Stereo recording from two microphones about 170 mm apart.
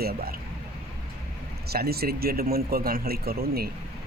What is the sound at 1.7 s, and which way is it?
A man's voice, 65° right (ahead or behind).